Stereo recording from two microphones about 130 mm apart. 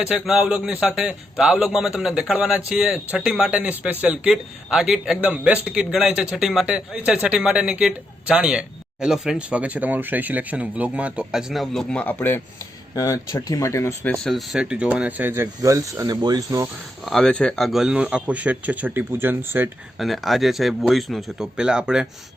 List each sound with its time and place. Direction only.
0.0 s a man's voice: 5° right (ahead or behind); by 12.4 s 15° left (ahead or behind)
12.9 s speech: 25° left (ahead or behind)
14.0 s speech: 10° left (ahead or behind)
14.3 s speech: 5° right (ahead or behind); by 16.6 s 30° right (ahead or behind)
17.1 s speech: 5° left (ahead or behind); by 19.7 s 15° right (ahead or behind)
20.0 s a man's voice: centre (ahead or behind)